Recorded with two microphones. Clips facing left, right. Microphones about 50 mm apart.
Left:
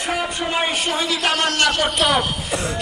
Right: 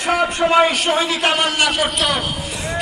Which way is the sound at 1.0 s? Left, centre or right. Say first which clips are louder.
Right 2 dB; right.